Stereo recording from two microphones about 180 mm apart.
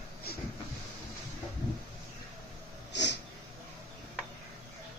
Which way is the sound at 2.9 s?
70° left (ahead or behind).